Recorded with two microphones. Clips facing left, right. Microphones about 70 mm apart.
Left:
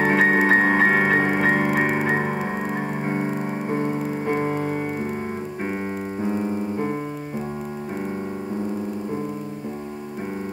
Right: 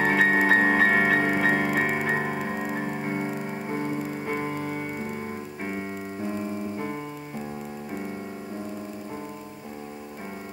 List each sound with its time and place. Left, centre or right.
0.0 s music: centre